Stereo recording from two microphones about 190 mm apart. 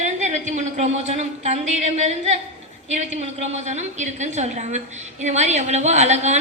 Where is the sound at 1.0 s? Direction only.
35° right (ahead or behind).